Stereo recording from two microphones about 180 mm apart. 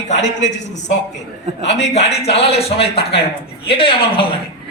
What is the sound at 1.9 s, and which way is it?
Speech, 35° left (ahead or behind).